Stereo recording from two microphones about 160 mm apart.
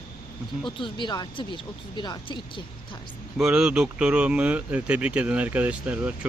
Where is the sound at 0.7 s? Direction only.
30° left (ahead or behind).